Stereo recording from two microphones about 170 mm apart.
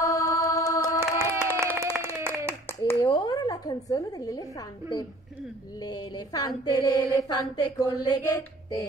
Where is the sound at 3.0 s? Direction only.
25° left (ahead or behind).